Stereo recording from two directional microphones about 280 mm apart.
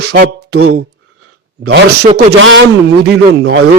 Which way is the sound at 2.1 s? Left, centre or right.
Right.